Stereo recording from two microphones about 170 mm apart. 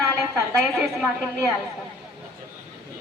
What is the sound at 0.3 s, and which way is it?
Speech, 10° right (ahead or behind).